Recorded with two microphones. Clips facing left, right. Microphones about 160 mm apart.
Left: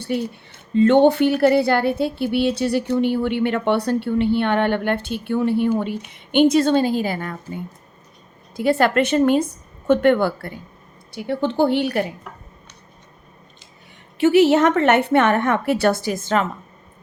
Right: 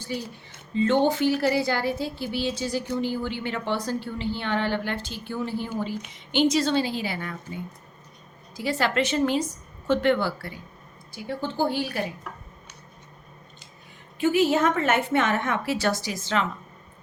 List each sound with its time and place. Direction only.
0.7 s a woman's voice: 60° left (ahead or behind)
11.1 s a woman's voice: 65° left (ahead or behind)
14.2 s a woman's voice: 75° left (ahead or behind); by 16.5 s 50° left (ahead or behind)